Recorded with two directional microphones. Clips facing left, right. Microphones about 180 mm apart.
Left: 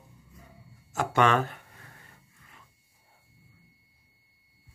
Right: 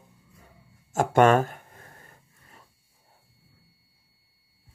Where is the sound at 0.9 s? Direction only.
50° right (ahead or behind).